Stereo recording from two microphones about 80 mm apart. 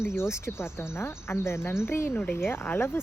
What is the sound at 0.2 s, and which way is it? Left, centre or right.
Speech, left.